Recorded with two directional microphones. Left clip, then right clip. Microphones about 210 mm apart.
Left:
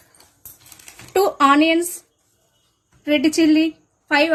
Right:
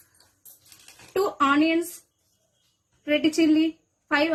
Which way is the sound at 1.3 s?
40° left (ahead or behind).